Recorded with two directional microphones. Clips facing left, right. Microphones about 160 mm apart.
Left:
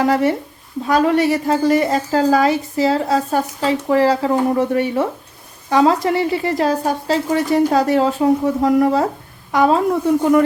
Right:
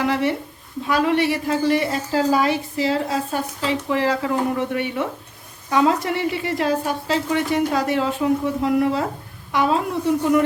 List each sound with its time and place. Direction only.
0.0 s a woman's voice: 40° left (ahead or behind)